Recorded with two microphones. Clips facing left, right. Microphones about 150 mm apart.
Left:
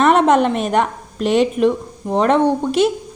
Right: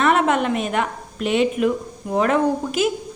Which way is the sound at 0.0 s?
35° left (ahead or behind).